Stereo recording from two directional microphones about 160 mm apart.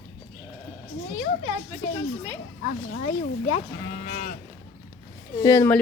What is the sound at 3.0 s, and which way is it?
Speech, 40° left (ahead or behind).